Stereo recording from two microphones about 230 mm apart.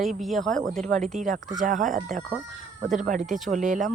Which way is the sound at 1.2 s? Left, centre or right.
Right.